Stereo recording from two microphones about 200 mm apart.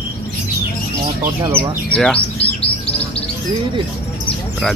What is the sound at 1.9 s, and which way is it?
Speech, 5° left (ahead or behind).